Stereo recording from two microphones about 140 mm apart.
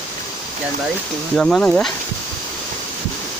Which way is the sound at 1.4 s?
5° left (ahead or behind).